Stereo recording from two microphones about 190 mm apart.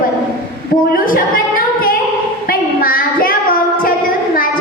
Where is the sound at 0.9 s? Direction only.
45° left (ahead or behind).